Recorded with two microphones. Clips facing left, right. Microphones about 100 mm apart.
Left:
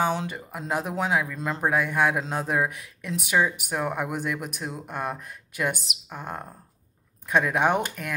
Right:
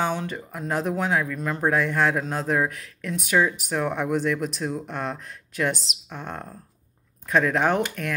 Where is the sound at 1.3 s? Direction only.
25° left (ahead or behind).